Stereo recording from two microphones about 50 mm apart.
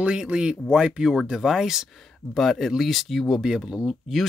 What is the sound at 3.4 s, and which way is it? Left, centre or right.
Speech, centre.